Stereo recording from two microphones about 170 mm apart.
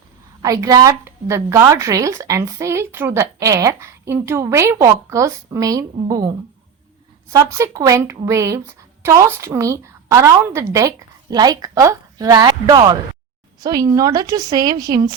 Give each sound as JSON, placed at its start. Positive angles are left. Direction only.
{"t": 0.4, "sound": "a woman's voice", "side_deg": -20}
{"t": 7.3, "sound": "a woman's voice", "side_deg": -20}